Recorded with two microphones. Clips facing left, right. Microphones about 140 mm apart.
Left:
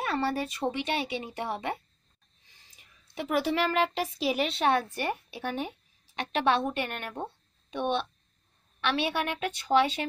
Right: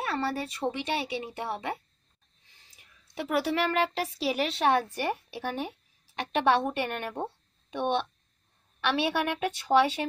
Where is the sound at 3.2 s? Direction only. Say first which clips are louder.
Even; centre (ahead or behind).